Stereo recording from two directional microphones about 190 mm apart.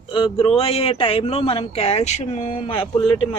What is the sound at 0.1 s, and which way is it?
Speech, 25° left (ahead or behind).